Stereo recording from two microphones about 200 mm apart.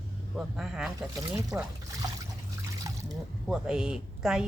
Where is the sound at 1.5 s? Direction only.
15° right (ahead or behind).